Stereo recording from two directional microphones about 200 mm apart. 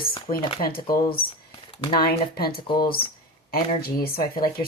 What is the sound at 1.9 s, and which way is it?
Speech, 50° left (ahead or behind).